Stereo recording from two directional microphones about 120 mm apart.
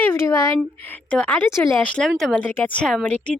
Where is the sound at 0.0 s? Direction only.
20° left (ahead or behind).